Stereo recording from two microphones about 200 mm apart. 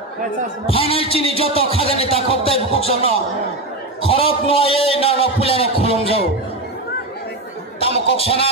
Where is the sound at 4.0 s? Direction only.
30° left (ahead or behind).